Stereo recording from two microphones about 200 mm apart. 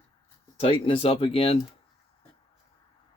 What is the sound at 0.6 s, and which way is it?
Speech, 25° left (ahead or behind).